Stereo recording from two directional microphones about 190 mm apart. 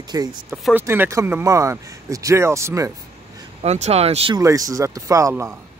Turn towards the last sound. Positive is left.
turn(degrees=-15)  # may be behind; listen again after turning